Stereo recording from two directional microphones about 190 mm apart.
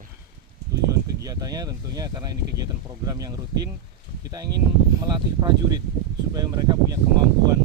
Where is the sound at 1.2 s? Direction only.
20° right (ahead or behind).